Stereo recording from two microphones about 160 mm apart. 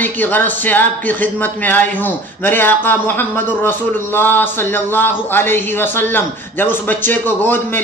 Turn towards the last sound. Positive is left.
turn(degrees=15)  # may be behind; listen again after turning